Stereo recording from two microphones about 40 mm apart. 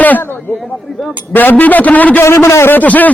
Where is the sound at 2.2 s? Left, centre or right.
Left.